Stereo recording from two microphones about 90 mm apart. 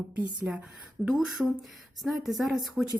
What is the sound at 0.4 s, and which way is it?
Speech, 20° right (ahead or behind).